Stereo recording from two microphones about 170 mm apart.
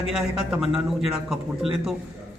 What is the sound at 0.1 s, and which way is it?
Speech, 5° right (ahead or behind).